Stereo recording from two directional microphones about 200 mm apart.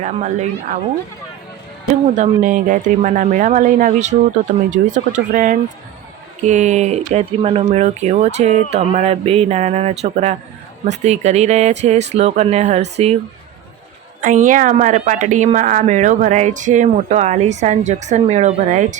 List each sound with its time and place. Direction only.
0.0 s a woman's voice: 35° right (ahead or behind)
2.1 s a woman's voice: 40° right (ahead or behind)
14.2 s a woman's voice: 40° right (ahead or behind)